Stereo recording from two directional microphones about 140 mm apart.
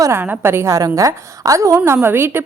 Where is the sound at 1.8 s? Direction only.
15° right (ahead or behind).